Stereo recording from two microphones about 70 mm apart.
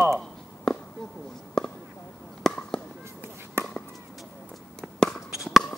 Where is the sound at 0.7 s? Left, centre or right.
Centre.